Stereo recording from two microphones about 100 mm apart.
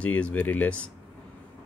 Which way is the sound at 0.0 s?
15° left (ahead or behind).